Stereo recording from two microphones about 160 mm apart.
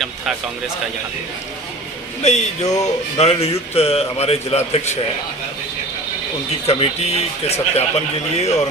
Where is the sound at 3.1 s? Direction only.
40° left (ahead or behind).